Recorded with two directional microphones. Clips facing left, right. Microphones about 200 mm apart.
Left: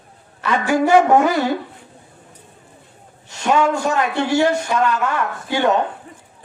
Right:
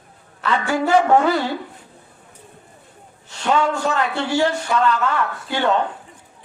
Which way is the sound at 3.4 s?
15° left (ahead or behind).